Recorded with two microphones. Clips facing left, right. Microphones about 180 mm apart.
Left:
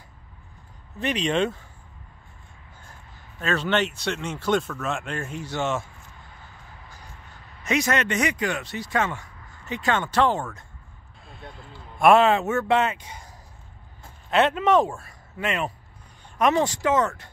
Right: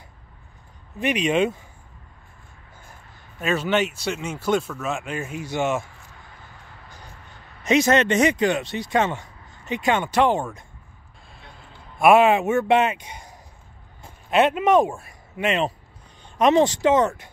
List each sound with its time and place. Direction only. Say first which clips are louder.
0.9 s speech: right 3 dB; 10° right (ahead or behind)
3.3 s speech: right 2 dB; 10° right (ahead or behind)
7.6 s speech: right 6 dB; 25° right (ahead or behind)
12.0 s speech: right 2 dB; 10° right (ahead or behind)